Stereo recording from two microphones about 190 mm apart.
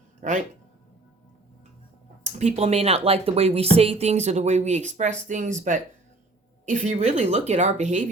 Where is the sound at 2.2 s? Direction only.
35° right (ahead or behind).